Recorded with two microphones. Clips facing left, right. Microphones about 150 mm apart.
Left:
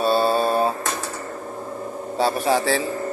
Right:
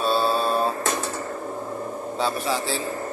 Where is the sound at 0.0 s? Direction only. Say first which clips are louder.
Left 3 dB; 50° left (ahead or behind).